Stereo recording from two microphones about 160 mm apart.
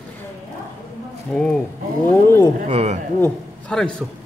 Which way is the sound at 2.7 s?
40° right (ahead or behind).